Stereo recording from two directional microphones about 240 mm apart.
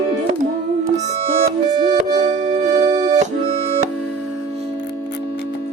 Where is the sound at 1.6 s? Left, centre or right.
Centre.